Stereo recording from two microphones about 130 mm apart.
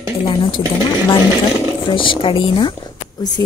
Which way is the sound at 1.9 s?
40° left (ahead or behind).